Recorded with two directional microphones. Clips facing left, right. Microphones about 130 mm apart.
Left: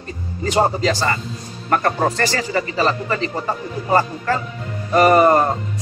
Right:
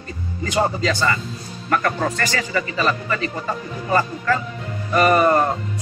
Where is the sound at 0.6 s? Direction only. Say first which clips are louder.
Left 2 dB; 35° left (ahead or behind).